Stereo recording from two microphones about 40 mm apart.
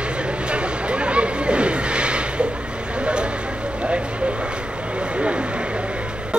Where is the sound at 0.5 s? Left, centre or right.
Right.